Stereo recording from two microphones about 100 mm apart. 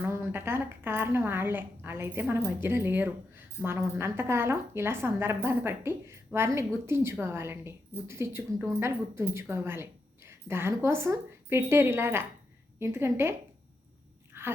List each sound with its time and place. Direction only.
0.0 s a sound: 25° right (ahead or behind)
2.6 s speech: 25° right (ahead or behind)
14.3 s chewing: 25° right (ahead or behind)